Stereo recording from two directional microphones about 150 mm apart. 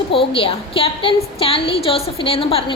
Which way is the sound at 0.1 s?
35° left (ahead or behind).